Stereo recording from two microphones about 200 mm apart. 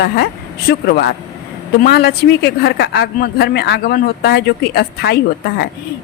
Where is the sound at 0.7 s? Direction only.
50° left (ahead or behind).